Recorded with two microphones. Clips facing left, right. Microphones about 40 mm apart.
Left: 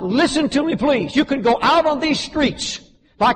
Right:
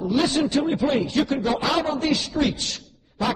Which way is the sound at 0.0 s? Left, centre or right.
Left.